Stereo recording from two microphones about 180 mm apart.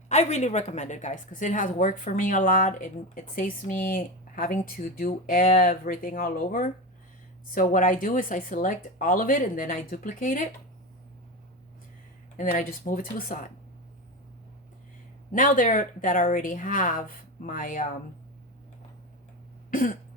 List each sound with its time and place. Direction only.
0.1 s speech: 40° left (ahead or behind)
12.4 s speech: 45° left (ahead or behind)
15.3 s speech: 45° left (ahead or behind)